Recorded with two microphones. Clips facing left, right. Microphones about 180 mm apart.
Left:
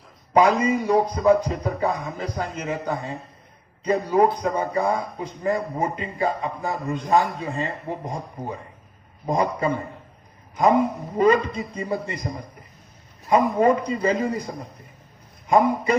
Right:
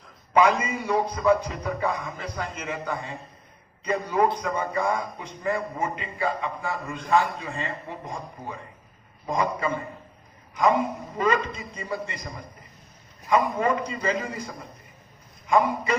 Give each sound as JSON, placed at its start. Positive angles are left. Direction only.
{"t": 0.3, "sound": "a man's voice", "side_deg": 40}
{"t": 13.3, "sound": "a man's voice", "side_deg": 40}